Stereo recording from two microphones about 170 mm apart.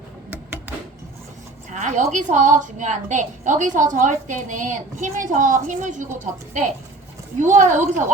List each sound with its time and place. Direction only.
1.7 s a woman's voice: 45° right (ahead or behind)
7.3 s a woman's voice: 45° right (ahead or behind)